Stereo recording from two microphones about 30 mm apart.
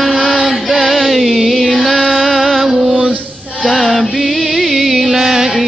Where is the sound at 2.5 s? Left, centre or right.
Centre.